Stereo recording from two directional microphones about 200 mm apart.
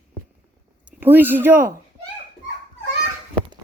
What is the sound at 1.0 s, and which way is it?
Speech, 10° right (ahead or behind).